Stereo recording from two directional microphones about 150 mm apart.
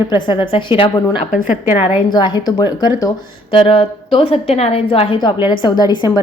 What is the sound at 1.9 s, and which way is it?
A woman's voice, 30° left (ahead or behind).